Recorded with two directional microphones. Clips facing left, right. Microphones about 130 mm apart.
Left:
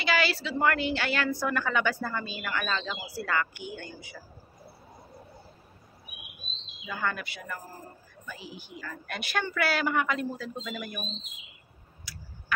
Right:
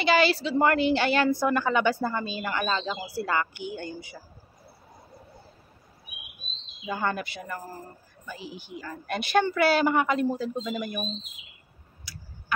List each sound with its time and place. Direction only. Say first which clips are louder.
0.0 s speech: right 6 dB; 25° right (ahead or behind)
6.9 s speech: right 4 dB; 30° right (ahead or behind)
12.0 s tick-tock: right 1 dB; 25° right (ahead or behind)